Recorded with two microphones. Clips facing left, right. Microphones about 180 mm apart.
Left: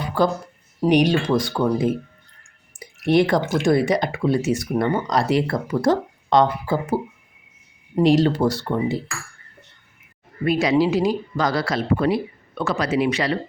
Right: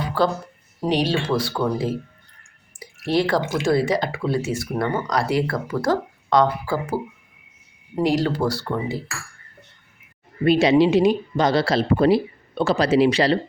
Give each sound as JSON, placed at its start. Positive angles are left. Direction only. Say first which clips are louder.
{"t": 0.2, "sound": "speech", "louder": "left 2 dB", "side_deg": 15}
{"t": 2.7, "sound": "a sound", "louder": "left 4 dB", "side_deg": 20}
{"t": 3.7, "sound": "speech", "louder": "left 1 dB", "side_deg": 20}
{"t": 10.4, "sound": "speech", "louder": "right 3 dB", "side_deg": -25}